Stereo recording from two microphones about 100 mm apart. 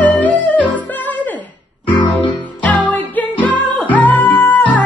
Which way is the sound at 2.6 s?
15° left (ahead or behind).